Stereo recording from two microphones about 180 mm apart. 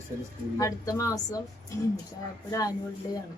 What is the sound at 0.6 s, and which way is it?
Speech, 20° left (ahead or behind).